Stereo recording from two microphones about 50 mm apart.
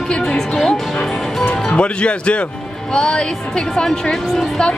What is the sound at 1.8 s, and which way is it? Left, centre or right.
A woman's voice, left.